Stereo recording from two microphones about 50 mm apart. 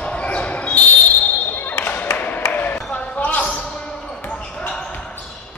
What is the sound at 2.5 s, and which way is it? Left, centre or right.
Ping, left.